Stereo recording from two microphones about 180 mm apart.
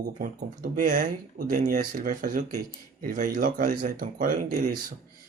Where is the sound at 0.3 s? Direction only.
45° right (ahead or behind).